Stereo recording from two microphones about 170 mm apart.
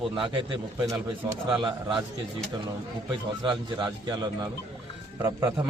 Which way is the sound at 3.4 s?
25° right (ahead or behind).